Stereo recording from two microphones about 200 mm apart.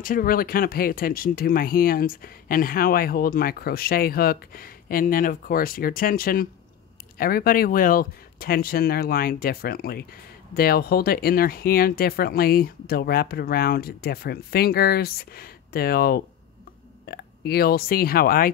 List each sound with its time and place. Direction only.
0.0 s speech: 45° left (ahead or behind)